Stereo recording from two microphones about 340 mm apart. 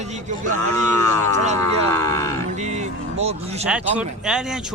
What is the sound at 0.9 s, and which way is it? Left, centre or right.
Speech, centre.